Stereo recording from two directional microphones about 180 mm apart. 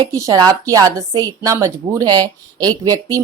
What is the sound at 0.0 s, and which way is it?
Speech, 20° right (ahead or behind).